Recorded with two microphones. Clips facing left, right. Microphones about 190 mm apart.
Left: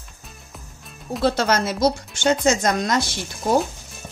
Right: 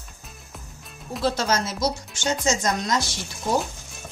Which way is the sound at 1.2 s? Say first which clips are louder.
Left 4 dB; 60° left (ahead or behind).